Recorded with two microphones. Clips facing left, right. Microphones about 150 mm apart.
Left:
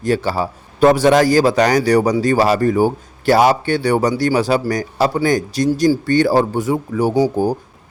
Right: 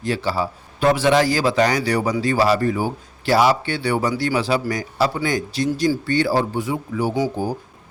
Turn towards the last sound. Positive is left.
turn(degrees=40)  # may be behind; listen again after turning